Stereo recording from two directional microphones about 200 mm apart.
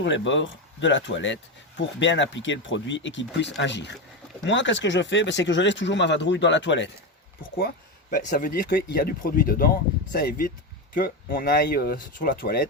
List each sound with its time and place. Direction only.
0.0 s speech: 65° left (ahead or behind)
8.1 s speech: 40° left (ahead or behind)